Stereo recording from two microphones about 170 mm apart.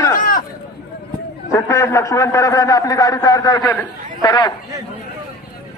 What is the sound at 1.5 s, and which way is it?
A man's voice, 15° left (ahead or behind).